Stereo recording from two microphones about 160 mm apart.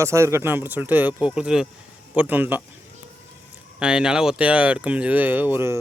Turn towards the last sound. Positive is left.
turn(degrees=-15)  # may be behind; listen again after turning